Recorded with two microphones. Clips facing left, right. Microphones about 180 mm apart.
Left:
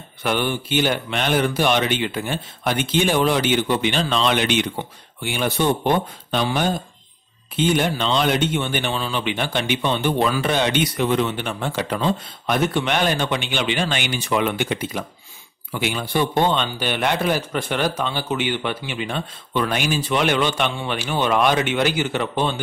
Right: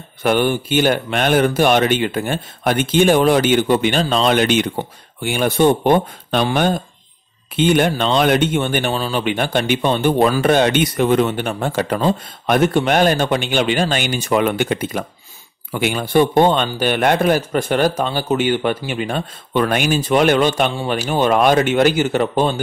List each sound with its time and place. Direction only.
0.2 s speech: 50° right (ahead or behind)